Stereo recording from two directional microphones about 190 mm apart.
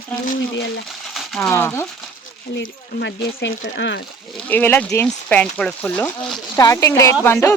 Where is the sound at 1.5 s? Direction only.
10° left (ahead or behind).